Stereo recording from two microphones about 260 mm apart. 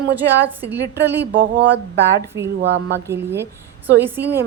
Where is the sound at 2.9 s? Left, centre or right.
Centre.